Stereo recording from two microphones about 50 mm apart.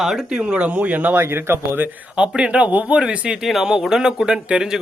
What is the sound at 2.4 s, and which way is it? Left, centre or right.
Speech, right.